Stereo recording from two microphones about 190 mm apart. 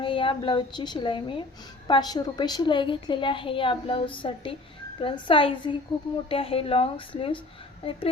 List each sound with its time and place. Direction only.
0.0 s a woman's voice: 25° left (ahead or behind)